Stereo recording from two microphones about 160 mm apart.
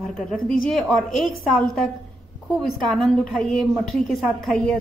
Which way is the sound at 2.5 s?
Centre (ahead or behind).